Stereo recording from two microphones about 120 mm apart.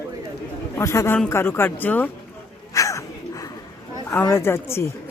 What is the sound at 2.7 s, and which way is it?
Dog, 25° left (ahead or behind).